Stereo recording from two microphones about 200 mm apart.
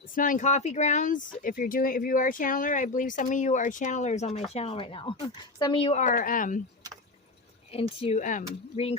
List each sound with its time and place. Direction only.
0.1 s speech: 40° left (ahead or behind)
7.7 s speech: 30° left (ahead or behind)